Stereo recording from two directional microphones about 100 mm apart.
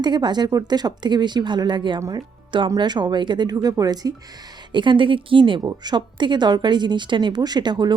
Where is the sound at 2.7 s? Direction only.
50° right (ahead or behind).